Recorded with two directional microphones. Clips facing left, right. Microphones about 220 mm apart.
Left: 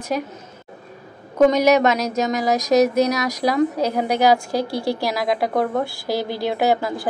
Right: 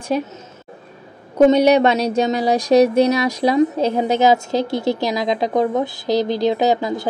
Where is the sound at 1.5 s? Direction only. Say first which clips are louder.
Right 3 dB; 30° right (ahead or behind).